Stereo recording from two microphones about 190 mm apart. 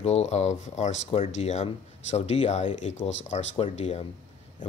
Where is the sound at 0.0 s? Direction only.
35° left (ahead or behind).